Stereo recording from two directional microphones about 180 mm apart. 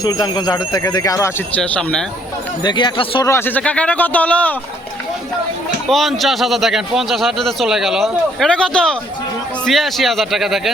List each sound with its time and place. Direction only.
0.0 s speech: 20° left (ahead or behind)
1.6 s speech: 5° left (ahead or behind)
2.6 s speech: 25° left (ahead or behind)
3.2 s speech: 15° left (ahead or behind)
5.9 s a man's voice: centre (ahead or behind)